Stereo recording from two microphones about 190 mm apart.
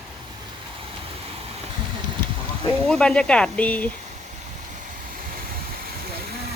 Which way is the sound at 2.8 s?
5° left (ahead or behind).